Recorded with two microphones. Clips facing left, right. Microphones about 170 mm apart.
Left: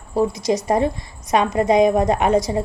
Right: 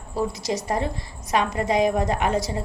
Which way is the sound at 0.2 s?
20° left (ahead or behind).